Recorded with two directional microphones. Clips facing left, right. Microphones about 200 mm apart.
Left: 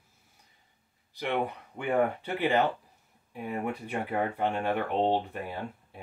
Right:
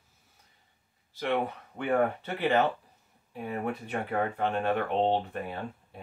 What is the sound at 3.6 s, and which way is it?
Speech, 10° left (ahead or behind).